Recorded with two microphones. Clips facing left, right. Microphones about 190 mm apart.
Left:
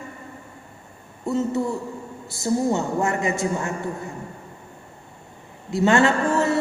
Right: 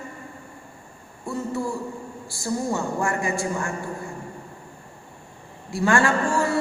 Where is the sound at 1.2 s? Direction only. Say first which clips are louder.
Left 5 dB; 20° left (ahead or behind).